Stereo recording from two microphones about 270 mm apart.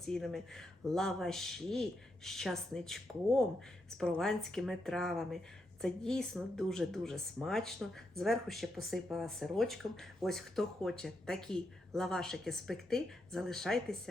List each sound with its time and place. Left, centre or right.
0.0 s speech: centre